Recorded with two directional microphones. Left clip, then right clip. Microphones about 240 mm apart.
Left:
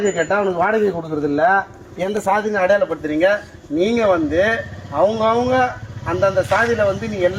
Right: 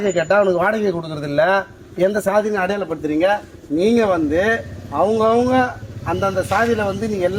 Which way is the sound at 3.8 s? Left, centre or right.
Right.